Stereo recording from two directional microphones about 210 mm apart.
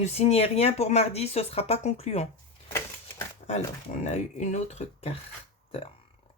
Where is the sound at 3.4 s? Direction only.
35° left (ahead or behind).